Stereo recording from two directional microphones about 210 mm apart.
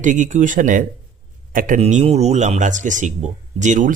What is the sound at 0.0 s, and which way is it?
Speech, 35° right (ahead or behind).